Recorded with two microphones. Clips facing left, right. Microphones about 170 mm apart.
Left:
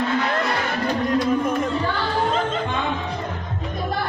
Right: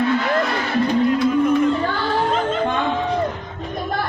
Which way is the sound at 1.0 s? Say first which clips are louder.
Right 1 dB; 45° left (ahead or behind).